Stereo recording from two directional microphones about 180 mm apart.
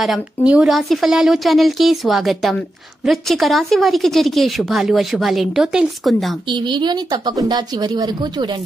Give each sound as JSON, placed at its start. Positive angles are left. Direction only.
{"t": 0.0, "sound": "a woman's voice", "side_deg": -5}
{"t": 6.4, "sound": "speech", "side_deg": -25}